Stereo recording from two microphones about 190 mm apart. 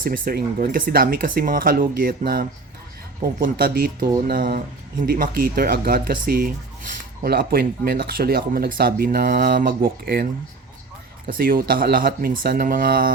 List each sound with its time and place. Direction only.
0.0 s speech: 50° right (ahead or behind)
11.3 s speech: 50° right (ahead or behind)